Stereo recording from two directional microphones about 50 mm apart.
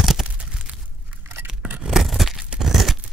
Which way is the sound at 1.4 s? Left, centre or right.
Centre.